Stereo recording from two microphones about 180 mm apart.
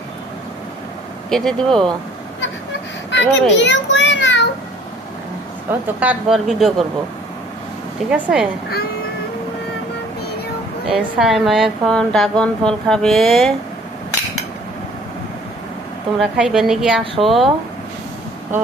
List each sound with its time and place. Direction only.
1.3 s a woman's voice: 5° left (ahead or behind)
3.1 s a sound: 85° left
6.0 s a woman's voice: 5° right (ahead or behind)
8.1 s a woman's voice: 5° right (ahead or behind)
10.8 s a woman's voice: centre (ahead or behind)
16.1 s a woman's voice: centre (ahead or behind)